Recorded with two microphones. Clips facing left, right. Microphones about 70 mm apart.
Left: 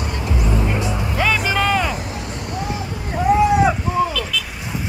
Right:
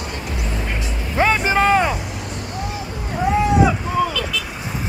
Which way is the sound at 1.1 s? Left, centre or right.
Right.